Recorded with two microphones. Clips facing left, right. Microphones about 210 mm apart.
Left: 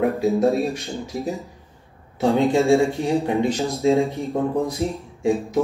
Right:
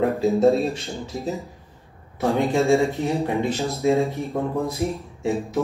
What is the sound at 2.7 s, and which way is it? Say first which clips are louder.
Speech: left 2 dB; 15° left (ahead or behind).